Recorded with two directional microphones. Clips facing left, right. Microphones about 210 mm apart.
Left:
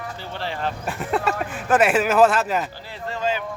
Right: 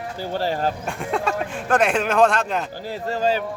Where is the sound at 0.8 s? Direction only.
5° left (ahead or behind).